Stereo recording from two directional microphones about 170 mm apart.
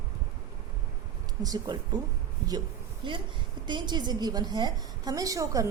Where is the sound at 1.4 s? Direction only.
20° right (ahead or behind).